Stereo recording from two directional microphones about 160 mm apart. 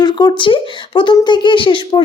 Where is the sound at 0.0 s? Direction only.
25° left (ahead or behind).